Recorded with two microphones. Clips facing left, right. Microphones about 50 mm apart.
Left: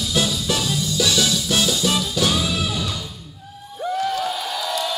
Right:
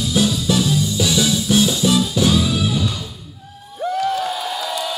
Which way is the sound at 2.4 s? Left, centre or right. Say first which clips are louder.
Right 4 dB; centre.